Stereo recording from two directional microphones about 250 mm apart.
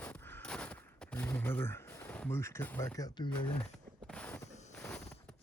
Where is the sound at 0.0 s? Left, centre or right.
Centre.